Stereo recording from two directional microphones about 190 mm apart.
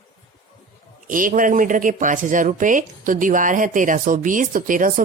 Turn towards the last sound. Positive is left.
turn(degrees=-45)  # may be behind; listen again after turning